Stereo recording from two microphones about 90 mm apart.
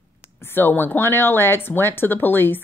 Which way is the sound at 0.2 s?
25° left (ahead or behind).